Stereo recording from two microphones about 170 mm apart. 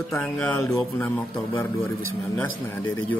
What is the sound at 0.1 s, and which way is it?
A man's voice, 15° left (ahead or behind).